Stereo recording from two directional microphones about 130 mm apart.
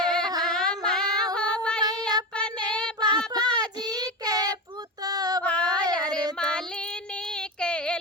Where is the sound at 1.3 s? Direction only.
10° left (ahead or behind).